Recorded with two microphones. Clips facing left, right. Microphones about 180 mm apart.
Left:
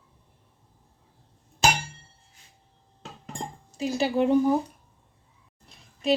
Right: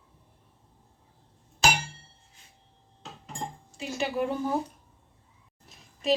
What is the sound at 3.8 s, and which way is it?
Speech, 35° left (ahead or behind).